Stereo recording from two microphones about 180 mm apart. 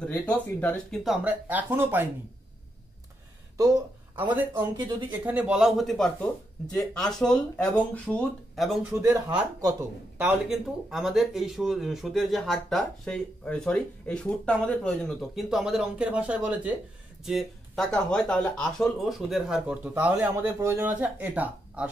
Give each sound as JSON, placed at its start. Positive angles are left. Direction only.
{"t": 0.0, "sound": "speech", "side_deg": 10}
{"t": 4.2, "sound": "speech", "side_deg": -10}
{"t": 8.9, "sound": "speech", "side_deg": -20}
{"t": 10.2, "sound": "speech", "side_deg": 0}